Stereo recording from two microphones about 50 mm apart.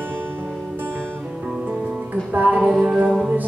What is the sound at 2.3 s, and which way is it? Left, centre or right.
Music, right.